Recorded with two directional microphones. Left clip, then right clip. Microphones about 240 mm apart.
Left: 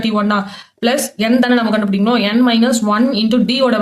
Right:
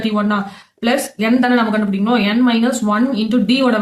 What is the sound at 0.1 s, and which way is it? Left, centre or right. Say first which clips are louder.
Speech: left 2 dB; left.